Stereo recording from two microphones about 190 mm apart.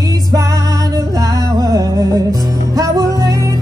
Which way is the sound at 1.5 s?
20° right (ahead or behind).